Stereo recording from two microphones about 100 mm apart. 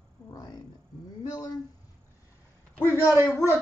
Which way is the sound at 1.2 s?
40° left (ahead or behind).